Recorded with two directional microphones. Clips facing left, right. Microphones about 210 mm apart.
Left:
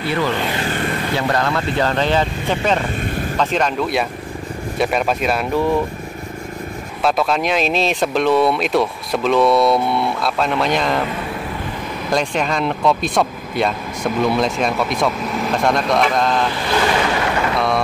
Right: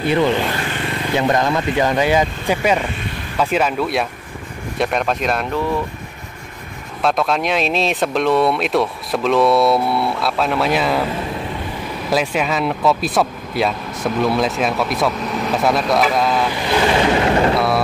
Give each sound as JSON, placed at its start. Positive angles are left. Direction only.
{"t": 0.1, "sound": "speech", "side_deg": -20}
{"t": 7.0, "sound": "speech", "side_deg": 0}
{"t": 12.1, "sound": "speech", "side_deg": -5}
{"t": 16.7, "sound": "speech", "side_deg": -25}
{"t": 17.6, "sound": "speech", "side_deg": -5}